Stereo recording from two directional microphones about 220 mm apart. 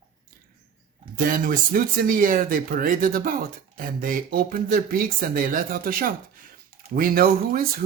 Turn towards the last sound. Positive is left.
turn(degrees=-40)  # may be behind; listen again after turning